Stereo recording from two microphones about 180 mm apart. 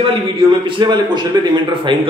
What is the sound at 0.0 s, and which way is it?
A man's voice, 30° right (ahead or behind).